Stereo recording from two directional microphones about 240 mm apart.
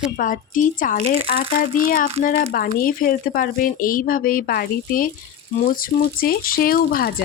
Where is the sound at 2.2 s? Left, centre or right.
Left.